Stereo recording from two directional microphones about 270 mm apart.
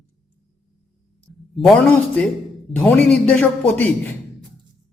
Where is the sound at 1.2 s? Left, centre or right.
Centre.